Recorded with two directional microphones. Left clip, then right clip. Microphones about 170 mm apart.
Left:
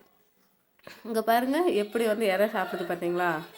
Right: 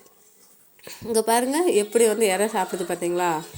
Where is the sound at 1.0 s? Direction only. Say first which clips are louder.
Right 4 dB; 10° right (ahead or behind).